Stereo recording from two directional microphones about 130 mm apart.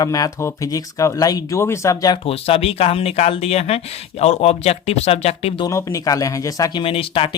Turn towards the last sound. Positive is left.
turn(degrees=45)  # may be behind; listen again after turning